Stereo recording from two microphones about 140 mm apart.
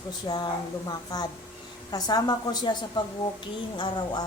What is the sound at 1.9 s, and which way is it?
A woman's voice, 30° left (ahead or behind).